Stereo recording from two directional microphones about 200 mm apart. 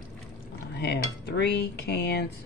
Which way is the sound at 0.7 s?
55° left (ahead or behind).